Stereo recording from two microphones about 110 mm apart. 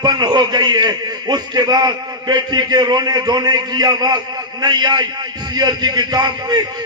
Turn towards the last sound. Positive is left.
turn(degrees=-40)  # may be behind; listen again after turning